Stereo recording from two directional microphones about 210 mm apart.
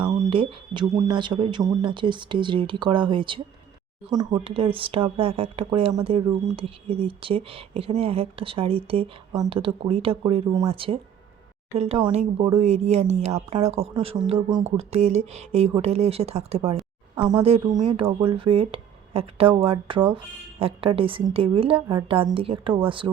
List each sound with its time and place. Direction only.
0.0 s speech: 25° right (ahead or behind)